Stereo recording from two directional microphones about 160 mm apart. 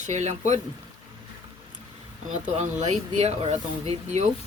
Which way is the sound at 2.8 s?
45° right (ahead or behind).